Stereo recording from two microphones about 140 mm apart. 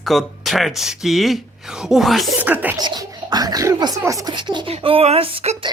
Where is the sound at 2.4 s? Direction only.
10° right (ahead or behind).